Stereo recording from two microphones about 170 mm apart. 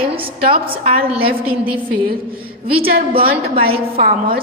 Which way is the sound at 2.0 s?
30° right (ahead or behind).